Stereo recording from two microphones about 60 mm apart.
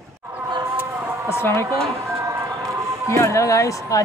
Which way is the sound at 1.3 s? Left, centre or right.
Left.